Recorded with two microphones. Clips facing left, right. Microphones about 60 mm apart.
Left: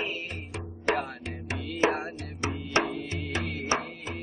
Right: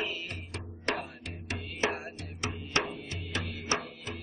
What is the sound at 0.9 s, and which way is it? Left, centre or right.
Music, centre.